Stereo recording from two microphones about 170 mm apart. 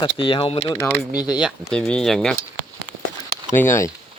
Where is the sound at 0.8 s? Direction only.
15° left (ahead or behind).